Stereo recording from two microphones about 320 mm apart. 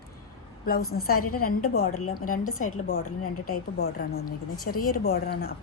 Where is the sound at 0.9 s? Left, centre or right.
Left.